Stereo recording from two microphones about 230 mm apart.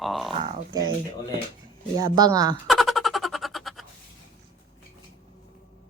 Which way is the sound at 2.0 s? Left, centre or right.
Centre.